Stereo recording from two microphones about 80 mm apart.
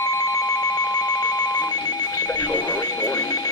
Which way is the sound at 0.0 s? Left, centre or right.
Left.